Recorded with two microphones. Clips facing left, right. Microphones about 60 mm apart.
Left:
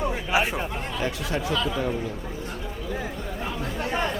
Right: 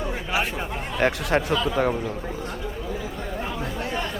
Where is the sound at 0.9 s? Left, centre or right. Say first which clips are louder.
Right 8 dB; right.